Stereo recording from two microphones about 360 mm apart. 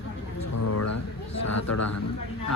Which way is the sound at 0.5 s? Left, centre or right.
Left.